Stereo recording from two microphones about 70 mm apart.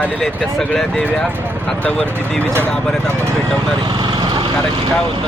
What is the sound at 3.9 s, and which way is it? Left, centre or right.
Vehicle, right.